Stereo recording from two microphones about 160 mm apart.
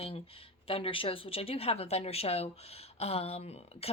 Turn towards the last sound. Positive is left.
turn(degrees=40)  # may be behind; listen again after turning